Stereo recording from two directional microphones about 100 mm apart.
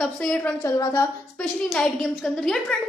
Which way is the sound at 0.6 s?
35° left (ahead or behind).